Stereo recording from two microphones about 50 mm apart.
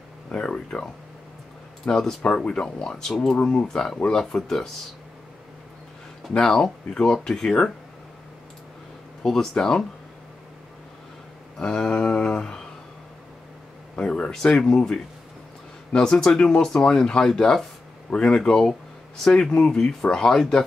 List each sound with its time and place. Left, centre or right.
0.3 s speech: centre
1.9 s speech: centre
6.3 s speech: centre
9.2 s speech: centre
11.5 s a sound: centre
13.9 s speech: left
14.3 s speech: centre